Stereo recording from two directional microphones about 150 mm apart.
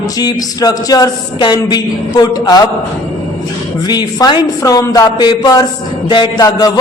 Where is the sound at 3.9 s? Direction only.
25° left (ahead or behind).